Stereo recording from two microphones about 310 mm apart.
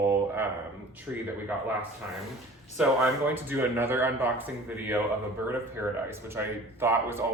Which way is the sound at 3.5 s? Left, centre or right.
Centre.